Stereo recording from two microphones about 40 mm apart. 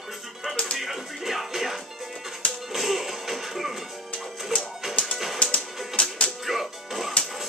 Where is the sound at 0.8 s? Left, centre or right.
Centre.